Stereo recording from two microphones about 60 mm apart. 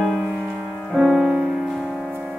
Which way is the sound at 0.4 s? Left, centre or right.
Centre.